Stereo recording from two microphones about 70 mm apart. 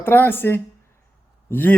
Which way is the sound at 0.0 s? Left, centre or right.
Left.